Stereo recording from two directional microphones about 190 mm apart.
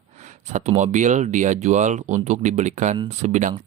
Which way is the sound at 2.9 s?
25° right (ahead or behind).